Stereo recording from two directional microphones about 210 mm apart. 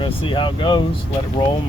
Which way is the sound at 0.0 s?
25° left (ahead or behind).